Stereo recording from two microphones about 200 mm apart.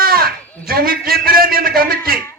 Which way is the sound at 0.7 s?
50° right (ahead or behind).